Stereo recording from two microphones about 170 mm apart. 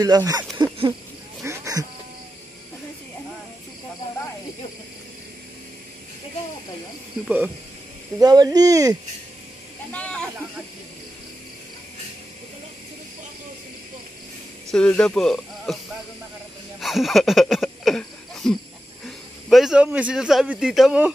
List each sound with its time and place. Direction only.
0.0 s speech: 20° right (ahead or behind)
1.4 s a sound: 15° right (ahead or behind)
7.2 s speech: 10° right (ahead or behind)
8.2 s speech: 20° right (ahead or behind)
9.9 s snake: 5° left (ahead or behind)
14.7 s speech: 5° left (ahead or behind)
16.8 s a man's voice: centre (ahead or behind)